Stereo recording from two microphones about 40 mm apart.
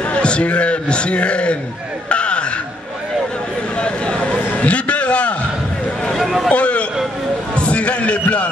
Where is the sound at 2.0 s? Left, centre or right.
Left.